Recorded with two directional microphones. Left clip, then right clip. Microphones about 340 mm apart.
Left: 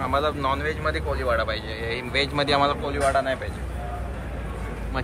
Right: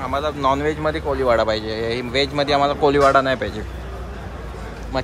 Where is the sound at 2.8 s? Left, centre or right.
Right.